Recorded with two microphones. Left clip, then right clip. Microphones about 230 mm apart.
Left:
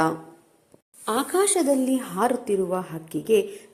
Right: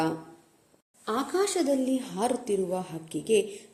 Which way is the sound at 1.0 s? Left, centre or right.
Centre.